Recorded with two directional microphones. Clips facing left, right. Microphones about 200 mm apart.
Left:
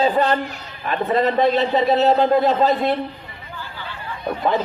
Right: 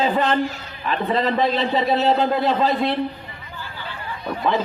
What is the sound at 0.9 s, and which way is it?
A man's voice, 50° left (ahead or behind).